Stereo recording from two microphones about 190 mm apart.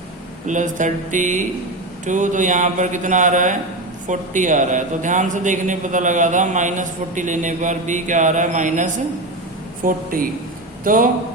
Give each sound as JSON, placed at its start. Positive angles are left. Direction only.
{"t": 0.4, "sound": "a man's voice", "side_deg": -40}